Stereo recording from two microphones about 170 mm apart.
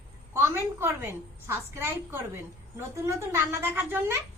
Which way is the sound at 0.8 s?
15° right (ahead or behind).